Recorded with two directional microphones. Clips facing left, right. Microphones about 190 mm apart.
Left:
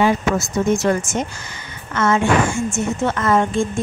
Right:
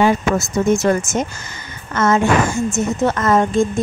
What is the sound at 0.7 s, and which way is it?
Speech, 45° right (ahead or behind).